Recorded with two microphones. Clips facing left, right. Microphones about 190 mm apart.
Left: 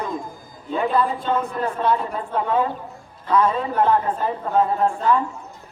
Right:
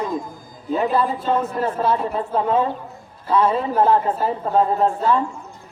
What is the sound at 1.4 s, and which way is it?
Speech, 5° right (ahead or behind).